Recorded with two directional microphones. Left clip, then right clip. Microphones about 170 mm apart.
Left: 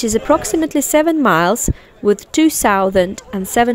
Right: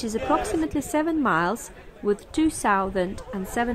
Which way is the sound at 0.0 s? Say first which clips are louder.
Left 9 dB; 50° left (ahead or behind).